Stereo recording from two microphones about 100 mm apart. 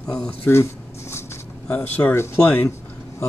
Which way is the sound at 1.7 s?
15° left (ahead or behind).